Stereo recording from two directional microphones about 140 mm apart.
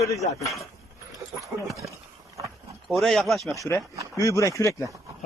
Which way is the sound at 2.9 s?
Centre (ahead or behind).